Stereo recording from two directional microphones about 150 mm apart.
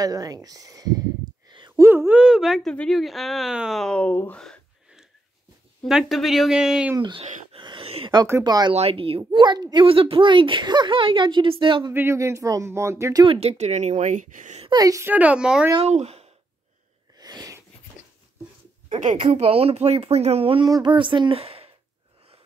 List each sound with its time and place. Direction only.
0.0 s a woman's voice: 25° right (ahead or behind); by 7.0 s 5° right (ahead or behind)
7.0 s speech: 30° right (ahead or behind)
7.5 s a sound: 35° right (ahead or behind)
8.3 s speech: 25° right (ahead or behind)
8.7 s speech: 40° right (ahead or behind)
11.9 s speech: 15° right (ahead or behind)
13.2 s a woman's voice: 40° right (ahead or behind); by 14.6 s 55° right (ahead or behind)
14.6 s a woman's voice: 25° right (ahead or behind); by 15.7 s 5° right (ahead or behind)
15.9 s speech: 45° right (ahead or behind)
17.2 s sneeze: 25° right (ahead or behind)
19.0 s speech: 35° right (ahead or behind)